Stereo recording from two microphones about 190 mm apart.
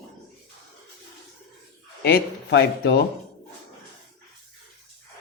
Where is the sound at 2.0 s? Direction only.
60° left (ahead or behind).